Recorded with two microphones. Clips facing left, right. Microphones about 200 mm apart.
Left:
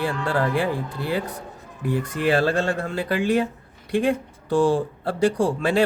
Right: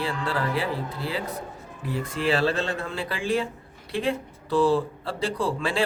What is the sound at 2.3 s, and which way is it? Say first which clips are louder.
Speech: left 4 dB; 45° left (ahead or behind).